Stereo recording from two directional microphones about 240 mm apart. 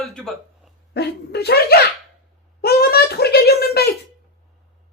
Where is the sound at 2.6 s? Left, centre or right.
Left.